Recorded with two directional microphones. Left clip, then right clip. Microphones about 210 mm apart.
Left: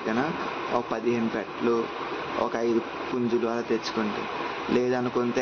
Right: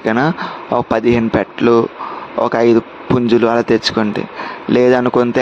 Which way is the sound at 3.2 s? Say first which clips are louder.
Right 15 dB; 50° right (ahead or behind).